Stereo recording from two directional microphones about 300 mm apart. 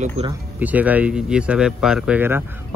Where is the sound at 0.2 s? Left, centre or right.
Right.